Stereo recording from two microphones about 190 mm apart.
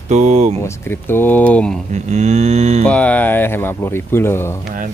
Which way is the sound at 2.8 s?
5° left (ahead or behind).